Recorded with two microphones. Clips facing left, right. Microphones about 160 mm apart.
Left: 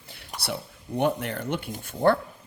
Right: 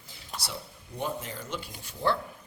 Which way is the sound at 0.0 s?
60° left (ahead or behind).